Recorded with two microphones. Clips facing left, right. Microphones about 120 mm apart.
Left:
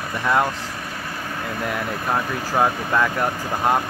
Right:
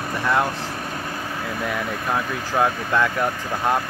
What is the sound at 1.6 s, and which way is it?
Speech, centre (ahead or behind).